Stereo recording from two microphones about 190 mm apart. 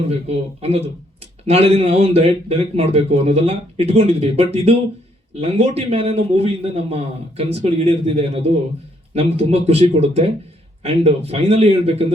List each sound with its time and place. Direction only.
0.0 s a man's voice: 35° right (ahead or behind)